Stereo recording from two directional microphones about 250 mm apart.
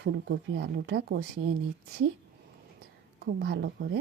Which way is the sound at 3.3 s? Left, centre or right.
Right.